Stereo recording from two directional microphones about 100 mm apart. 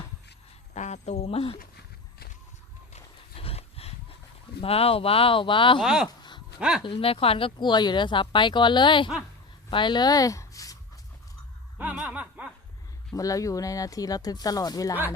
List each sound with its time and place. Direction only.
1.2 s speech: 80° left
2.9 s horse: 80° left
4.6 s speech: 75° left (ahead or behind); by 5.8 s 55° left (ahead or behind)
5.8 s speech: 5° right (ahead or behind)
6.1 s a sound: 45° left (ahead or behind)
6.6 s speech: 5° right (ahead or behind)
6.8 s speech: 65° left (ahead or behind); by 10.8 s 35° left (ahead or behind)
11.9 s snicker: 10° right (ahead or behind)
13.1 s speech: 35° left (ahead or behind)